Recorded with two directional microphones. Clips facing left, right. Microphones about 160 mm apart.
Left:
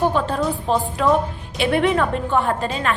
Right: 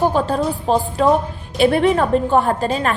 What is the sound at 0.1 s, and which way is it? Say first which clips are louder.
A woman's voice: right 2 dB; 35° right (ahead or behind).